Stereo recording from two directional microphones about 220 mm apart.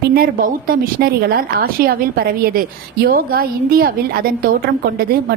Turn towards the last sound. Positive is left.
turn(degrees=-45)  # may be behind; listen again after turning